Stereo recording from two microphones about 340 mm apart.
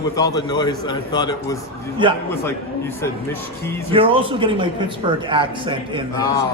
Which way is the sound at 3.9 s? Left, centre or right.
Centre.